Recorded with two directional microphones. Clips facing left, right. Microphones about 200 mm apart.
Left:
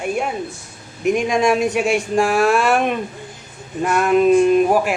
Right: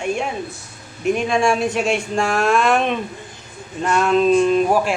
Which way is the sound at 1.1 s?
15° left (ahead or behind).